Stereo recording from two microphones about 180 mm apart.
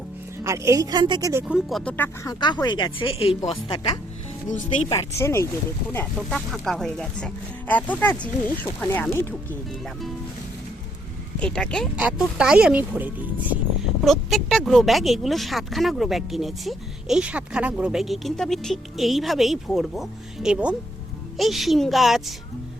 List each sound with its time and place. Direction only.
0.4 s speech: 15° right (ahead or behind)
1.8 s speech: 5° left (ahead or behind)
2.2 s speech: 25° left (ahead or behind)
4.9 s speech: 15° left (ahead or behind)
11.3 s speech: 5° left (ahead or behind)